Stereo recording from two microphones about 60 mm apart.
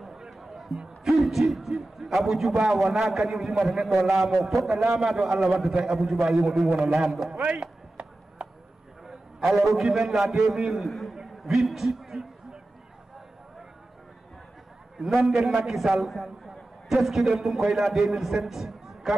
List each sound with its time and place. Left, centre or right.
0.0 s a man's voice: centre
7.6 s chop: right
9.0 s a sound: centre
9.8 s a man's voice: centre
11.1 s a sound: centre
15.0 s a man's voice: centre